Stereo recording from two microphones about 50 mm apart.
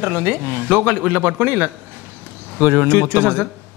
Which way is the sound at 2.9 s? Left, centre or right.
Right.